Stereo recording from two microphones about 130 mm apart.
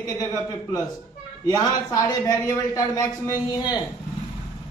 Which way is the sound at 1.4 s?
30° left (ahead or behind).